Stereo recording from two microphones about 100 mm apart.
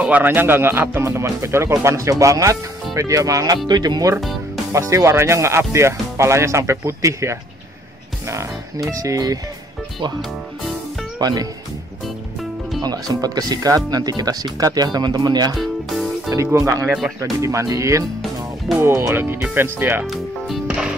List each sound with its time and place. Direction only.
0.0 s speech: 15° right (ahead or behind); by 3.5 s 35° right (ahead or behind)
3.5 s speech: 45° right (ahead or behind)
4.7 s speech: 30° right (ahead or behind)
11.1 s speech: 45° right (ahead or behind)
12.8 s speech: 40° right (ahead or behind)
15.5 s music: centre (ahead or behind)
16.5 s speech: 30° right (ahead or behind)
20.1 s music: centre (ahead or behind)